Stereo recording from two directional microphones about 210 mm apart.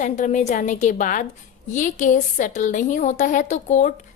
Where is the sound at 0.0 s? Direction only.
35° left (ahead or behind).